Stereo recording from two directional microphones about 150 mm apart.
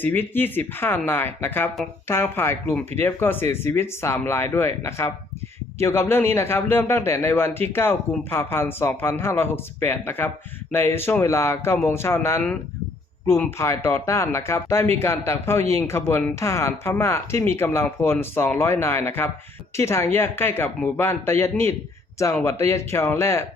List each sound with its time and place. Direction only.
0.0 s speech: 15° left (ahead or behind)
13.6 s speech: 20° left (ahead or behind)